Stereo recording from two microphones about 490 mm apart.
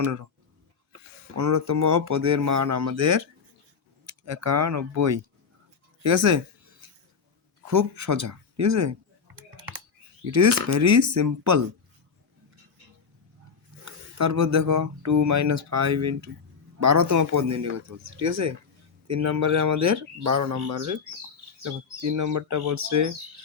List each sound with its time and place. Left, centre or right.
0.0 s speech: right
1.4 s speech: right
7.7 s speech: right
9.2 s typing: right
10.3 s speech: right
13.8 s speech: right